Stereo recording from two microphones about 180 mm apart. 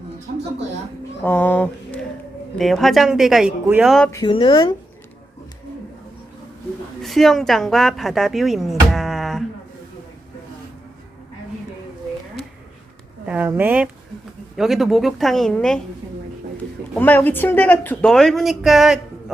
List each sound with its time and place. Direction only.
1.2 s speech: 10° left (ahead or behind)
4.1 s speech: 25° left (ahead or behind)
7.0 s speech: centre (ahead or behind)
13.2 s speech: 10° right (ahead or behind)
16.9 s speech: 10° left (ahead or behind)